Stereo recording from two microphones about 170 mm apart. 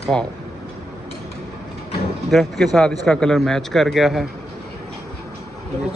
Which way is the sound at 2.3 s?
Centre (ahead or behind).